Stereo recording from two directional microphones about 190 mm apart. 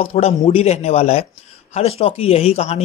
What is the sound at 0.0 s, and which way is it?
Speech, 30° left (ahead or behind).